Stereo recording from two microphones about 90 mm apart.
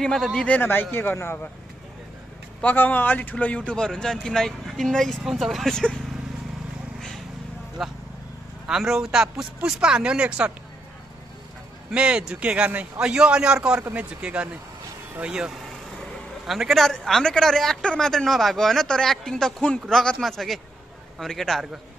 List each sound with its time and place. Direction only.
0.0 s a man's voice: 5° left (ahead or behind)
0.6 s a man's voice: 25° left (ahead or behind)
2.6 s a man's voice: 20° left (ahead or behind)
7.8 s a man's voice: centre (ahead or behind)
11.9 s a man's voice: 10° right (ahead or behind)